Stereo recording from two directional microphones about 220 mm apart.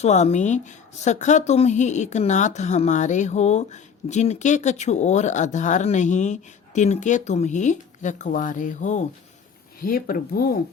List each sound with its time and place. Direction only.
0.0 s speech: 30° left (ahead or behind)